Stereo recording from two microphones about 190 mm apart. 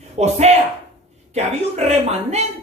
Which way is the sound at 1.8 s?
35° right (ahead or behind).